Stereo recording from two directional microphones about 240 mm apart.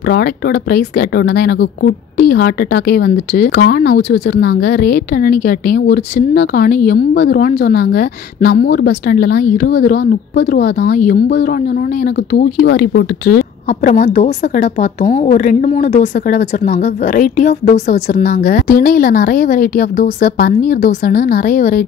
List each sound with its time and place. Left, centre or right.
0.1 s speech: left
13.8 s speech: left